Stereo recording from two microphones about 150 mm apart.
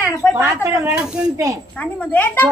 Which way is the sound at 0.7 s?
20° right (ahead or behind).